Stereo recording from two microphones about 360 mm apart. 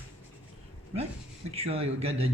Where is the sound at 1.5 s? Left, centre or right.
Centre.